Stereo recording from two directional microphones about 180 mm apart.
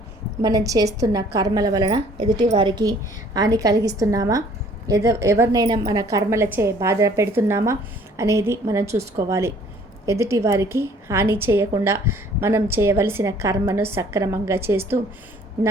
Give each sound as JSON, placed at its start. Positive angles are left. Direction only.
{"t": 0.4, "sound": "a woman's voice", "side_deg": -20}